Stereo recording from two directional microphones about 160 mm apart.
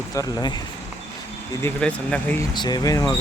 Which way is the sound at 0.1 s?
20° left (ahead or behind).